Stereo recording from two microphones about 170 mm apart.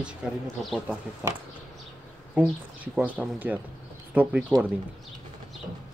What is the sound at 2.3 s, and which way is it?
Speech, 5° right (ahead or behind).